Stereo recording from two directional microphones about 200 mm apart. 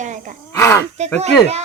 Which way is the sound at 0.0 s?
40° right (ahead or behind).